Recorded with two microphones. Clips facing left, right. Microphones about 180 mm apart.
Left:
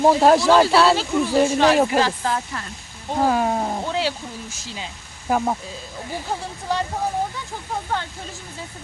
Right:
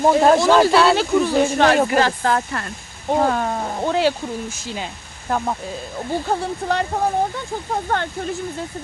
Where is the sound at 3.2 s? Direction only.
5° left (ahead or behind).